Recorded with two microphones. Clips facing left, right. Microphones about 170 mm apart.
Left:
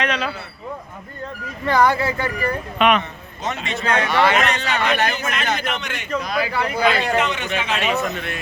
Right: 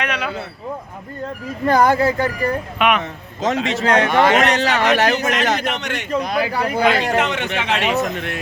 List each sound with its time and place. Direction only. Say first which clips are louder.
0.0 s a sound: left 1 dB; 10° right (ahead or behind)
1.6 s speech: right 3 dB; 45° right (ahead or behind)
2.7 s speech: left 2 dB; 10° right (ahead or behind)
3.0 s a man's voice: right 6 dB; 90° right
4.0 s speech: right 1 dB; 45° right (ahead or behind)
4.4 s a man's voice: right 4 dB; 85° right
5.8 s speech: right 5 dB; 75° right (ahead or behind)
6.2 s speech: right 2 dB; 50° right (ahead or behind)
7.2 s speech: right 2 dB; 75° right (ahead or behind)